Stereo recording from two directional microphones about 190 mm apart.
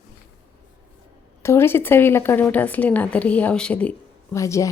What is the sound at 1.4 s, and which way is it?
A woman's voice, 15° left (ahead or behind).